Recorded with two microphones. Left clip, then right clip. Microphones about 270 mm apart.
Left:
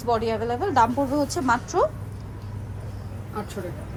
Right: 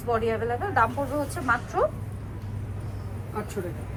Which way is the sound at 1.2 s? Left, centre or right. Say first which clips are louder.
Left 3 dB; centre.